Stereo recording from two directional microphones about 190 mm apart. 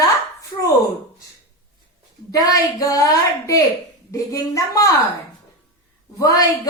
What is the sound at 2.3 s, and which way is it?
A woman's voice, 20° left (ahead or behind).